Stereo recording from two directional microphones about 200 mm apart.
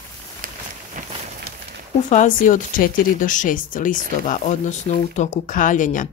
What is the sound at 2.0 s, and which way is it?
Speech, 40° left (ahead or behind).